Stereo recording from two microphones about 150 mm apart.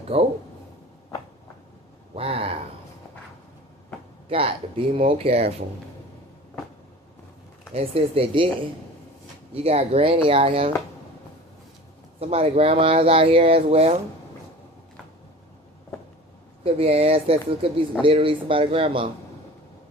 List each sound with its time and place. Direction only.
0.1 s speech: 40° right (ahead or behind)
2.1 s a sound: 40° right (ahead or behind)
4.3 s speech: 40° right (ahead or behind)
7.7 s speech: 40° right (ahead or behind)
9.5 s speech: 45° right (ahead or behind)
12.2 s speech: 40° right (ahead or behind)
16.6 s speech: 40° right (ahead or behind)